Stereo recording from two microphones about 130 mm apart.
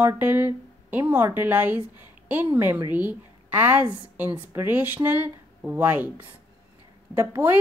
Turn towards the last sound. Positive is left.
turn(degrees=-15)  # may be behind; listen again after turning